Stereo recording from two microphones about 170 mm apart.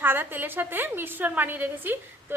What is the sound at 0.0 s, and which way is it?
A woman's voice, 10° right (ahead or behind).